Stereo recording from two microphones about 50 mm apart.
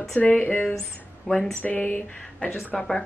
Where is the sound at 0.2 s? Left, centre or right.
Left.